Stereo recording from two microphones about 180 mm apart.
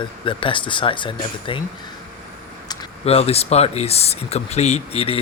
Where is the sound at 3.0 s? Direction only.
35° left (ahead or behind).